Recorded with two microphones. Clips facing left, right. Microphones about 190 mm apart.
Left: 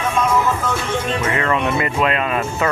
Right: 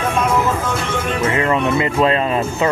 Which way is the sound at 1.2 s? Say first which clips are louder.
Right 5 dB; 25° right (ahead or behind).